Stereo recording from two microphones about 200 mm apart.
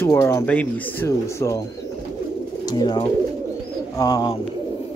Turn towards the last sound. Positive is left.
turn(degrees=20)  # may be behind; listen again after turning